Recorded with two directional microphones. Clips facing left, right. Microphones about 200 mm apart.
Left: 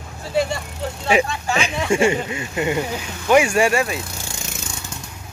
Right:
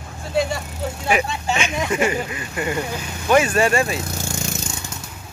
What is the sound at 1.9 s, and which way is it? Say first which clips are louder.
Speech: left 6 dB; 30° left (ahead or behind).